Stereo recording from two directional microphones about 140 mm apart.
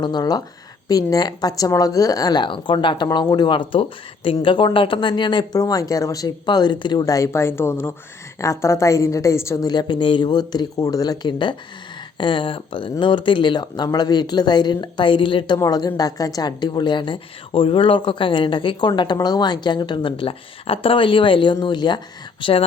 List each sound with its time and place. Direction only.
0.0 s a woman's voice: 30° left (ahead or behind)